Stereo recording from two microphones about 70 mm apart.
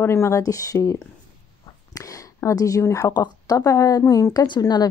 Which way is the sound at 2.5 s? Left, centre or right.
Left.